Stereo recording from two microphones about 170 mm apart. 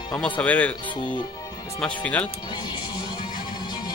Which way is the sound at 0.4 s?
10° left (ahead or behind).